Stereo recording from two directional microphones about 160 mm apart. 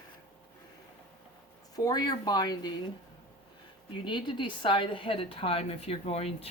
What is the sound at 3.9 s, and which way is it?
A woman's voice, 30° left (ahead or behind).